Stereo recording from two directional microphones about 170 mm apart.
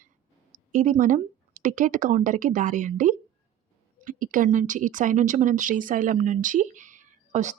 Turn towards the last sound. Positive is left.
turn(degrees=-45)  # may be behind; listen again after turning